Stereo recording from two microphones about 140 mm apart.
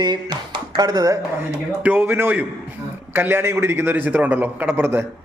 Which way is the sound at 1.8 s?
15° right (ahead or behind).